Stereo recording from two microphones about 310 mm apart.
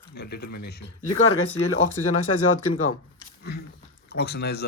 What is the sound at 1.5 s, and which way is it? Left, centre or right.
Speech, left.